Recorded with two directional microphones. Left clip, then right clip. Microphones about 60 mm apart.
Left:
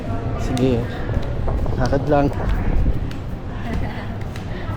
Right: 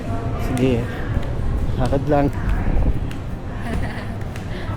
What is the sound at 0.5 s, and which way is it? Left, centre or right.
Speech, centre.